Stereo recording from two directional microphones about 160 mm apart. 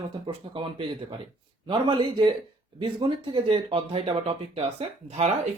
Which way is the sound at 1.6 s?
30° right (ahead or behind).